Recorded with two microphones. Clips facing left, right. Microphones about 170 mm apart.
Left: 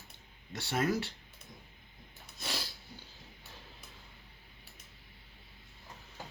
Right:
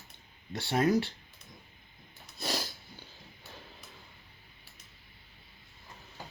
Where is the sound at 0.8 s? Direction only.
Centre (ahead or behind).